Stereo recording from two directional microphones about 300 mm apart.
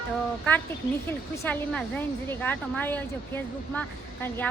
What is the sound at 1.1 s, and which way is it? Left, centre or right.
Speech, centre.